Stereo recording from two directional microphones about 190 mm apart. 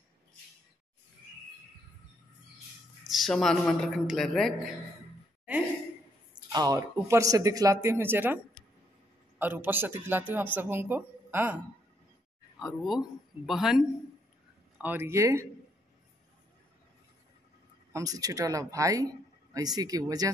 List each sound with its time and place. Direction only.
3.0 s a man's voice: centre (ahead or behind)
6.3 s speech: 20° right (ahead or behind)
9.4 s a man's voice: 10° right (ahead or behind)
17.9 s speech: 20° right (ahead or behind)